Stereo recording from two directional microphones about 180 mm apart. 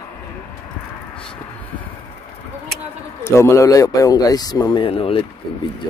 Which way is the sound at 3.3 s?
15° left (ahead or behind).